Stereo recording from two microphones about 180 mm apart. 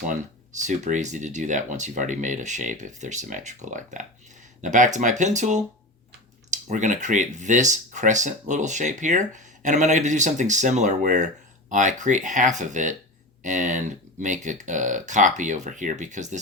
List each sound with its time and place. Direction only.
0.1 s speech: 40° right (ahead or behind)